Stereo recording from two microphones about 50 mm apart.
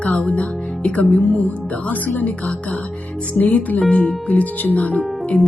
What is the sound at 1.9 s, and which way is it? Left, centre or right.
Speech, left.